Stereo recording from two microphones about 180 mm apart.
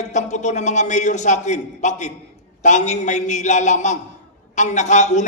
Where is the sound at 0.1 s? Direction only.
40° left (ahead or behind).